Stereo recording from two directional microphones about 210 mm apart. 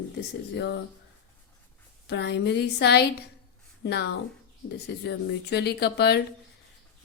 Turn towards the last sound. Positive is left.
turn(degrees=50)  # may be behind; listen again after turning